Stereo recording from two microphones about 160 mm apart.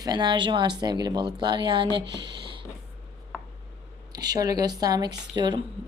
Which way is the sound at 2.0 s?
90° right.